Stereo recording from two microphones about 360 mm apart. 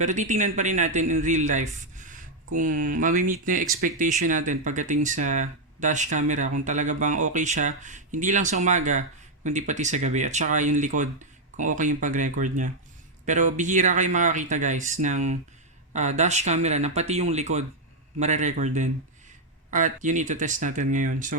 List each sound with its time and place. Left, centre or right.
0.0 s speech: centre